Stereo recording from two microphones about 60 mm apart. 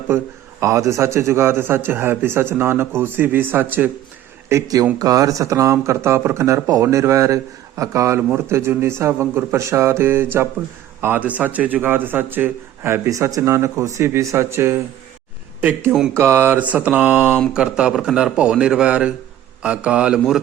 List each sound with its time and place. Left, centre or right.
0.1 s a man's voice: right
0.6 s a man's voice: right
4.5 s speech: right
4.9 s speech: right
11.0 s a man's voice: right
13.1 s speech: right
16.1 s a man's voice: right
16.6 s mantra: right
17.5 s a man's voice: centre